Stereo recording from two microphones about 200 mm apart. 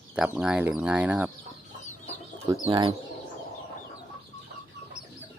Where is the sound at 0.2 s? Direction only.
5° right (ahead or behind).